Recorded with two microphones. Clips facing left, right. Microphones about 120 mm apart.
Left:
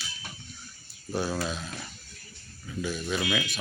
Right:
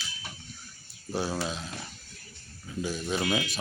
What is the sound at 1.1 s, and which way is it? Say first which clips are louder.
Speech: left 1 dB; 30° right (ahead or behind).